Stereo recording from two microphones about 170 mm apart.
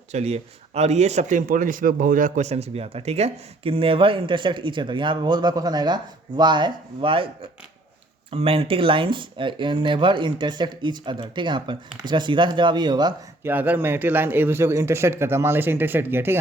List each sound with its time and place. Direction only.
0.1 s a man's voice: 40° right (ahead or behind)
8.3 s speech: 35° right (ahead or behind)
13.4 s a man's voice: 10° right (ahead or behind)